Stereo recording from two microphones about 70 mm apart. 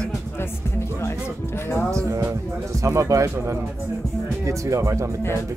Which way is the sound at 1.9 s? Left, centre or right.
Right.